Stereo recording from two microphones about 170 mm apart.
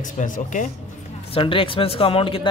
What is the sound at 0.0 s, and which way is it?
Speech, 50° left (ahead or behind).